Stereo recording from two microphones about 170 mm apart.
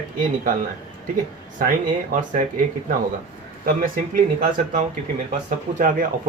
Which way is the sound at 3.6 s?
50° right (ahead or behind).